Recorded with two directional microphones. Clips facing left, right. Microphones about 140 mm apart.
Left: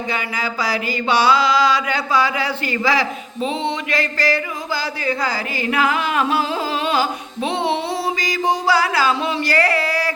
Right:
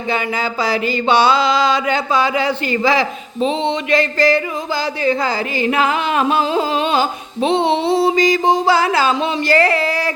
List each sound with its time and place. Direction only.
0.1 s mantra: 25° right (ahead or behind)